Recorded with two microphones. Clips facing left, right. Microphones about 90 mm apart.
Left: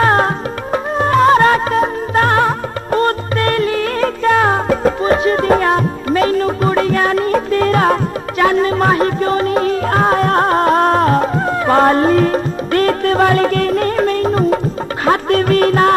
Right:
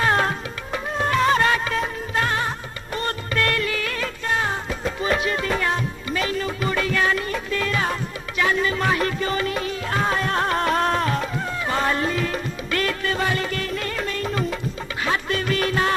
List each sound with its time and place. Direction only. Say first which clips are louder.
0.0 s music: left 8 dB; 40° left (ahead or behind)
4.2 s music: left 11 dB; 65° left (ahead or behind)
5.0 s music: left 9 dB; 40° left (ahead or behind)